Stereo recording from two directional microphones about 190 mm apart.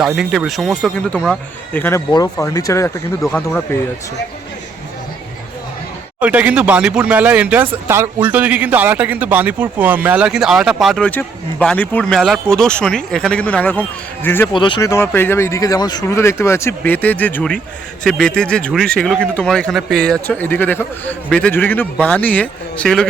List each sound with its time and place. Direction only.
0.0 s speech: centre (ahead or behind)
6.1 s speech: 5° right (ahead or behind); by 14.5 s 10° left (ahead or behind)
14.5 s speech: 25° left (ahead or behind); by 23.0 s 5° left (ahead or behind)